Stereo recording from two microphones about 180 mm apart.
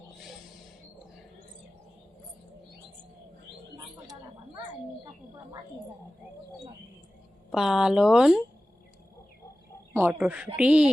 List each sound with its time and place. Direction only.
4.0 s a sound: 20° right (ahead or behind)
7.5 s speech: centre (ahead or behind)
9.9 s a woman's voice: 10° right (ahead or behind)